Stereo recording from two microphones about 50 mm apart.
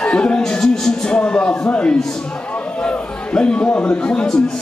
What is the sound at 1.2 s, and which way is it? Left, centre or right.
Speech, left.